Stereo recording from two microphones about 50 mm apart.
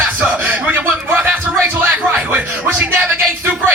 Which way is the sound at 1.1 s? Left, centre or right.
Right.